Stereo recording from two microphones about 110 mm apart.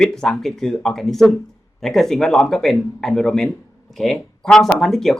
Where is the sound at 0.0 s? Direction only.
5° left (ahead or behind).